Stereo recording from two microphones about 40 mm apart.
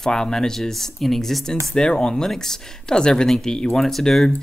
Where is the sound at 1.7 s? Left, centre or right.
Left.